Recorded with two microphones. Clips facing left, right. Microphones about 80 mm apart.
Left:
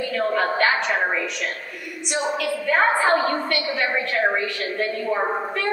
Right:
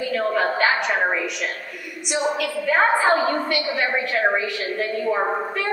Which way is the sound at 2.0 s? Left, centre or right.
Centre.